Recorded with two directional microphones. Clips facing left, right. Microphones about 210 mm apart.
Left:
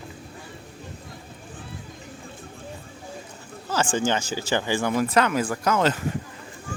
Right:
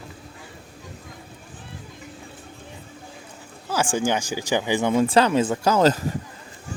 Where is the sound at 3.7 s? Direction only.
10° right (ahead or behind); by 6.0 s 40° right (ahead or behind).